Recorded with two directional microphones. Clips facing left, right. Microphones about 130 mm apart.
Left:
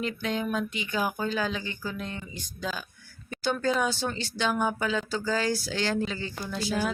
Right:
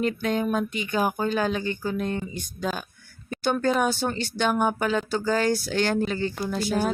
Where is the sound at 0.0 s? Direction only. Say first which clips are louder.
Right 5 dB; 45° right (ahead or behind).